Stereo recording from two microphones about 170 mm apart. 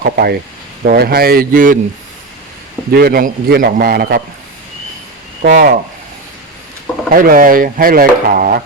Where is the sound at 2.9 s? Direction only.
60° right (ahead or behind).